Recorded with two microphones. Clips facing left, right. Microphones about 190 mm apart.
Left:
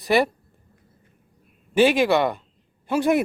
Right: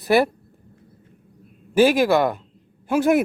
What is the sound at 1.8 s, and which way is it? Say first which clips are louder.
Speech: right 2 dB; centre (ahead or behind).